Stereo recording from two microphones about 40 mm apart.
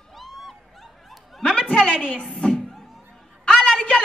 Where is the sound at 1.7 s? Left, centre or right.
Left.